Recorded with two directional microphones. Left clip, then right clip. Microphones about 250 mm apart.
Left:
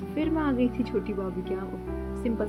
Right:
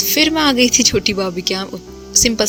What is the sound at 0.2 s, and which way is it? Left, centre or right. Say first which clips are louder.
A woman's voice: right 13 dB; right.